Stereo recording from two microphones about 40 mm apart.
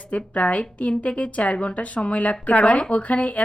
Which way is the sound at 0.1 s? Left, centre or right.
Left.